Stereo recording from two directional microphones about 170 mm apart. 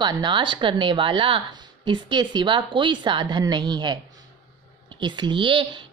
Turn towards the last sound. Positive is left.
turn(degrees=-30)  # may be behind; listen again after turning